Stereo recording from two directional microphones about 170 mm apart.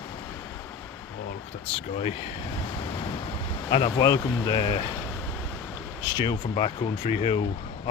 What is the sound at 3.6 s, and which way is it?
Speech, 25° left (ahead or behind).